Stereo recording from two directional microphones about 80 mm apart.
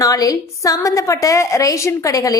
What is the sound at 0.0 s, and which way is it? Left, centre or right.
A woman's voice, left.